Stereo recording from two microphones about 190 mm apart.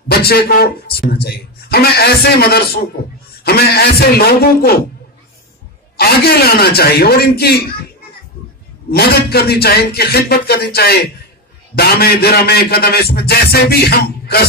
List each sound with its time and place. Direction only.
0.1 s a man's voice: 55° left (ahead or behind)
5.9 s a man's voice: 55° left (ahead or behind)
8.9 s a man's voice: 55° left (ahead or behind)